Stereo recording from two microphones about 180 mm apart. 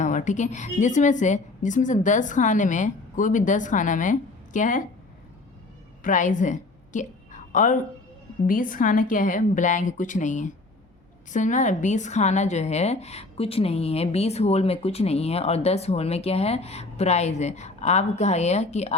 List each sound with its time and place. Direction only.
0.0 s a woman's voice: 45° left (ahead or behind)
6.0 s a sound: 45° left (ahead or behind)
8.4 s a woman's voice: 50° left (ahead or behind)